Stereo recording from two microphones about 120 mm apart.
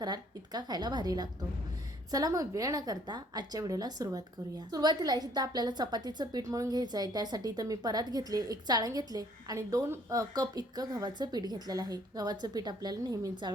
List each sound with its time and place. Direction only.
0.0 s a woman's voice: 35° right (ahead or behind)